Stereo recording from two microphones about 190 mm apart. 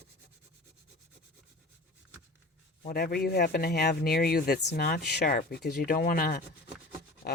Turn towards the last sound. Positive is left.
turn(degrees=50)  # may be behind; listen again after turning